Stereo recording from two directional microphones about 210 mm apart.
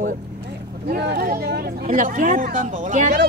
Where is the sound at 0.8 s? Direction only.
50° right (ahead or behind); by 3.2 s 35° right (ahead or behind).